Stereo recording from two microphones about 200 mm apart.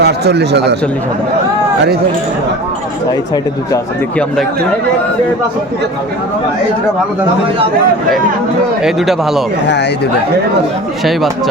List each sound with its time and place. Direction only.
0.0 s speech: 55° right (ahead or behind)
8.8 s a man's voice: centre (ahead or behind)